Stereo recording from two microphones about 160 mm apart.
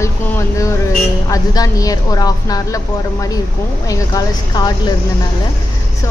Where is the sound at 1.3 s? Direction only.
25° left (ahead or behind).